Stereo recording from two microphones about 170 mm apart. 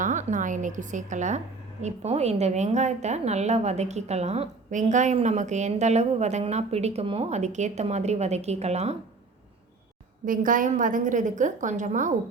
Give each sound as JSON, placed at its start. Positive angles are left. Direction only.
{"t": 0.0, "sound": "a woman's voice", "side_deg": -45}
{"t": 10.2, "sound": "a woman's voice", "side_deg": -50}